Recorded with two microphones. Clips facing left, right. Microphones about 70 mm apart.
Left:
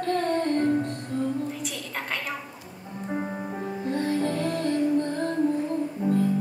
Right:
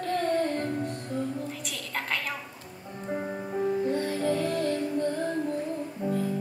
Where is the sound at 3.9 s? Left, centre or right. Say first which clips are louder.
Left 1 dB; centre.